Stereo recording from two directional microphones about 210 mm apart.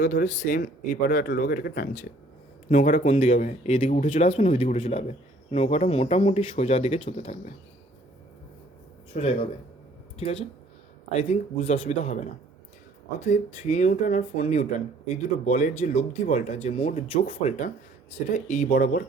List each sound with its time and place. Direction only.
0.0 s speech: 40° left (ahead or behind)
9.1 s speech: 30° left (ahead or behind)